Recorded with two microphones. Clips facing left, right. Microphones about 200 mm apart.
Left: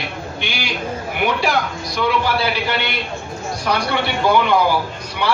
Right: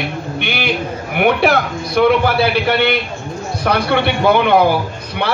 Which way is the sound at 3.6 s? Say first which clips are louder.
Right 5 dB; 60° right (ahead or behind).